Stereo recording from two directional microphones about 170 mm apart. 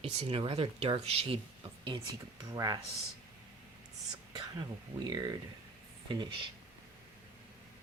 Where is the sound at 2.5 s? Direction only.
20° right (ahead or behind).